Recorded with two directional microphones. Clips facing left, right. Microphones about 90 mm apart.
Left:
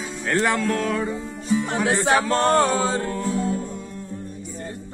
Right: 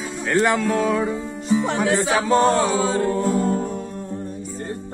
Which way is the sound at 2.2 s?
5° right (ahead or behind).